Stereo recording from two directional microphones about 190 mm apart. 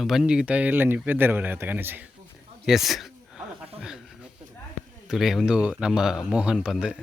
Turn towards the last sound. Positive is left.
turn(degrees=-5)  # may be behind; listen again after turning